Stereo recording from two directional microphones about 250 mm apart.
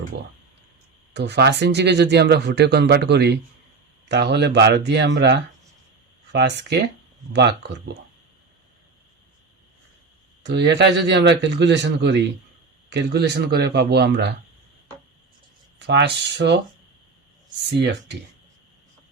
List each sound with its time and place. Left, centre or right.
1.1 s speech: right
7.3 s speech: right
10.4 s speech: right
15.8 s speech: right
17.7 s speech: right